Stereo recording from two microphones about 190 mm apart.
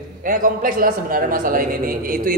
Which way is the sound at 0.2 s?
45° right (ahead or behind).